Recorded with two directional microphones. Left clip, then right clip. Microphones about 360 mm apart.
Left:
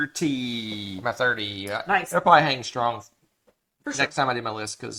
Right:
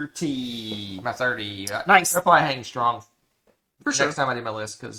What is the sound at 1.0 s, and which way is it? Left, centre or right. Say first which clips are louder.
Speech: left 1 dB; left.